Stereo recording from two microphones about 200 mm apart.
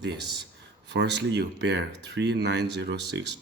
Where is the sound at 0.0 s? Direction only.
60° right (ahead or behind).